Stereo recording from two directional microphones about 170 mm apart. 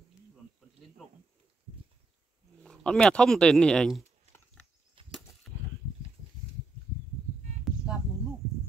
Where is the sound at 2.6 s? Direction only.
5° left (ahead or behind).